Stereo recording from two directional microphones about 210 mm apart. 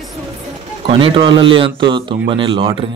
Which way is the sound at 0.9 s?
25° right (ahead or behind).